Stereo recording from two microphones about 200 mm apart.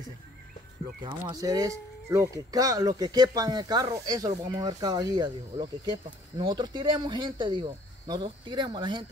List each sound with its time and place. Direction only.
1.2 s speech: 15° right (ahead or behind)